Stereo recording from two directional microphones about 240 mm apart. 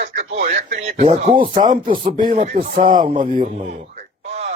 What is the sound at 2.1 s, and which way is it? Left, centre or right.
Speech, right.